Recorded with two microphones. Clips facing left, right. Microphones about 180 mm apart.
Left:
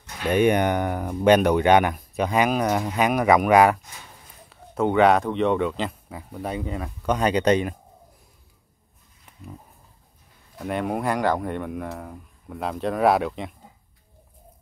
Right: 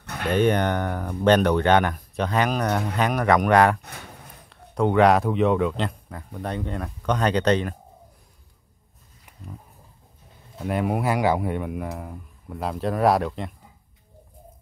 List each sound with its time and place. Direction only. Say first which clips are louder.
0.3 s speech: left 1 dB; 10° left (ahead or behind)
3.8 s a sound: right 5 dB; 65° right (ahead or behind)
4.5 s speech: even; centre (ahead or behind)
10.6 s speech: right 1 dB; 5° right (ahead or behind)